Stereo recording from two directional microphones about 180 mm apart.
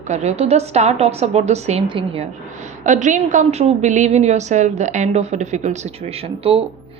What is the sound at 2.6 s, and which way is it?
A woman's voice, 45° right (ahead or behind).